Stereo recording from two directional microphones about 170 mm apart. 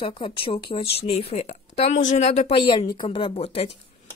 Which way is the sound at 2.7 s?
30° left (ahead or behind).